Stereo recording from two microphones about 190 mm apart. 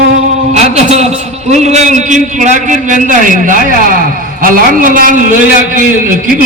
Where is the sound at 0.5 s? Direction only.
35° right (ahead or behind).